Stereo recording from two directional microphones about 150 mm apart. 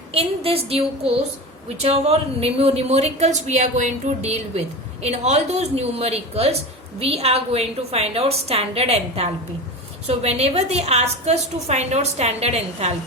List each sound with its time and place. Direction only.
0.1 s a woman's voice: 40° right (ahead or behind)